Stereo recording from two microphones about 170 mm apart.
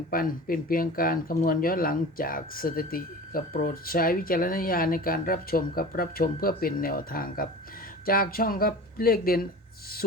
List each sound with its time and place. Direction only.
0.1 s speech: 55° left (ahead or behind)